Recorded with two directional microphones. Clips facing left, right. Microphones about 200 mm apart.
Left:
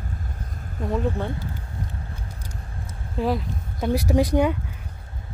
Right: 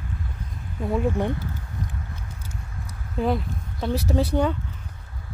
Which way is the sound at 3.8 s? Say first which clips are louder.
Left 3 dB; 15° left (ahead or behind).